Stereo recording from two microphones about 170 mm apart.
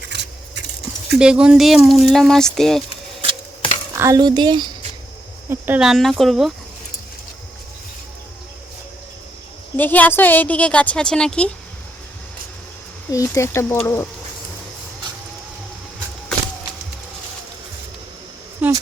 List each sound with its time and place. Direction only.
0.1 s a sound: 90° right
1.2 s speech: 5° right (ahead or behind)
3.9 s speech: 20° right (ahead or behind)
5.5 s speech: 10° right (ahead or behind)
9.7 s a woman's voice: 10° left (ahead or behind)
13.1 s a woman's voice: 20° left (ahead or behind)
18.6 s a sound: 10° right (ahead or behind)